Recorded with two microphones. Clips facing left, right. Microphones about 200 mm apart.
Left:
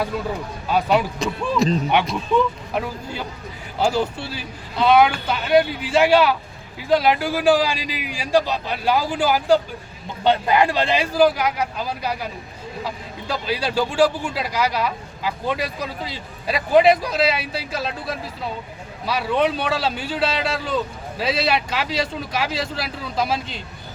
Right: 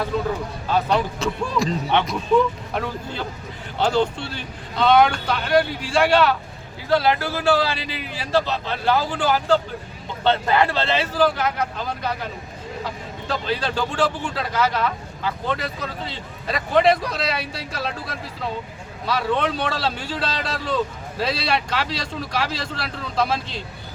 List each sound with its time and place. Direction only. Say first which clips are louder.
0.7 s speech: left 2 dB; 10° left (ahead or behind)
1.6 s speech: left 7 dB; 20° left (ahead or behind)
2.7 s a man's voice: left 1 dB; 5° left (ahead or behind)
19.0 s a man's voice: left 2 dB; 10° left (ahead or behind)